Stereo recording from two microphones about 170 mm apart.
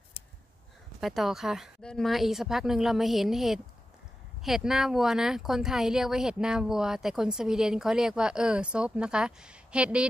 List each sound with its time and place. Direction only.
1.0 s speech: centre (ahead or behind)